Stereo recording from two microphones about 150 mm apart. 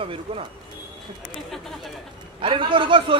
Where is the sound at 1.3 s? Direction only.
Centre (ahead or behind).